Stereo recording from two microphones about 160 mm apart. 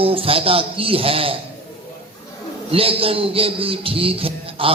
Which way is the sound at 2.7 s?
35° right (ahead or behind).